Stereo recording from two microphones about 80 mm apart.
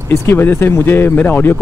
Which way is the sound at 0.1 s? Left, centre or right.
Left.